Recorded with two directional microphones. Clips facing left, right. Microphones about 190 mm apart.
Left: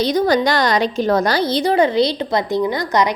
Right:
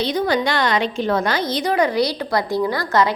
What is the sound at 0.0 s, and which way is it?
A woman's voice, 40° left (ahead or behind).